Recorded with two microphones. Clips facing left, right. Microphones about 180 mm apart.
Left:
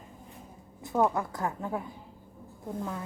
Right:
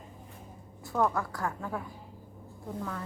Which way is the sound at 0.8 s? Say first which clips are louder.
Left 2 dB; 20° left (ahead or behind).